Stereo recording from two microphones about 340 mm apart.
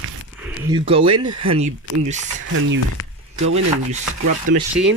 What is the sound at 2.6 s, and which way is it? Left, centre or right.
Speech, right.